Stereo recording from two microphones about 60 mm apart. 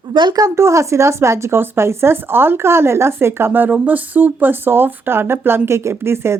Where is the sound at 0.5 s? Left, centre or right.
Right.